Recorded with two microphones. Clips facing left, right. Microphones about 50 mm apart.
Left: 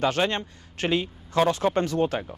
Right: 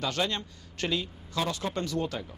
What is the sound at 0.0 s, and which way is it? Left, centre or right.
Speech, left.